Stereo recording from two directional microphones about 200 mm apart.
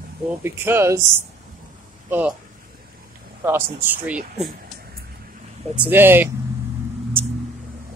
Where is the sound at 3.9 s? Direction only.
5° right (ahead or behind).